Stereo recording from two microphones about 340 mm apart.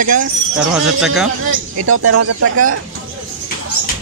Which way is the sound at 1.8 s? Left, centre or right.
Right.